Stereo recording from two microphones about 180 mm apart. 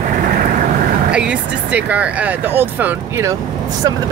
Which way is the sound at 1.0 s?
5° right (ahead or behind).